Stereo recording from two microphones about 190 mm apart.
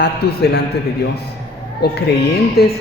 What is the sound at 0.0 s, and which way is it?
Speech, 60° left (ahead or behind).